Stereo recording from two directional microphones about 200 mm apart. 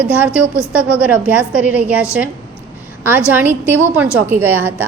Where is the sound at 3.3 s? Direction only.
10° right (ahead or behind).